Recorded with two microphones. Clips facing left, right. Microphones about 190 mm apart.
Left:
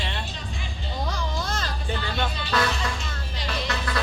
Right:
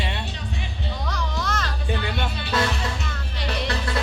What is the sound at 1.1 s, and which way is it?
Music, 30° left (ahead or behind).